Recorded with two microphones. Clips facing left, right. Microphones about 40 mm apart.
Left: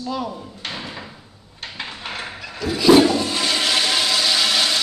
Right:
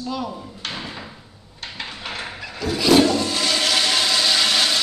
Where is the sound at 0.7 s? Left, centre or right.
Centre.